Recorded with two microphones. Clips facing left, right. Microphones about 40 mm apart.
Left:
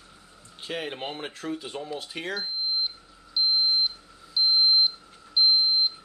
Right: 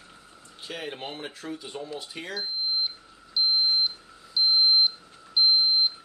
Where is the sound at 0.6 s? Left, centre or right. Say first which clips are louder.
Left 3 dB; centre.